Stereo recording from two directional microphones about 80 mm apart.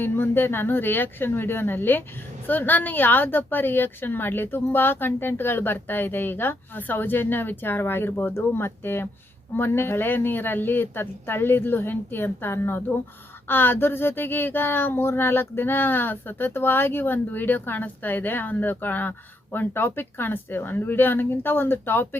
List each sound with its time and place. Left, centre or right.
0.0 s speech: left